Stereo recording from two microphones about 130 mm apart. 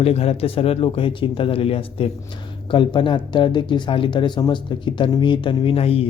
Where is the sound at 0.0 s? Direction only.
50° left (ahead or behind).